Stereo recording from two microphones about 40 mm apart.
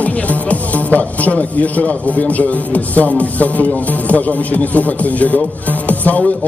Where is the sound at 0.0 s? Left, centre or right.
Left.